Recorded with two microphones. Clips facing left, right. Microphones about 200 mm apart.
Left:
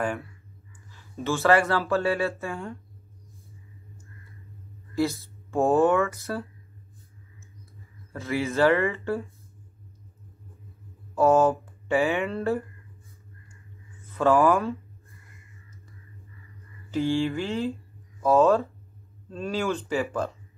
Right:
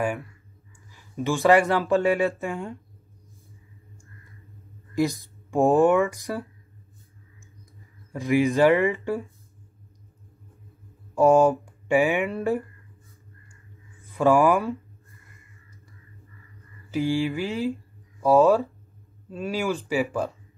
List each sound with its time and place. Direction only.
0.0 s speech: 15° right (ahead or behind)
4.9 s speech: 15° right (ahead or behind)
8.1 s speech: 15° right (ahead or behind)
11.1 s speech: 15° right (ahead or behind)
14.0 s speech: 10° right (ahead or behind)
16.9 s speech: 15° right (ahead or behind)